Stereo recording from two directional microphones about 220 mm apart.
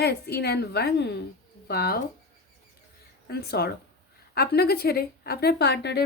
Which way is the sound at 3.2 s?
45° left (ahead or behind).